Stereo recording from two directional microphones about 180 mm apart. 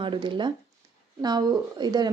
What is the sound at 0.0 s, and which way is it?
Speech, 25° right (ahead or behind).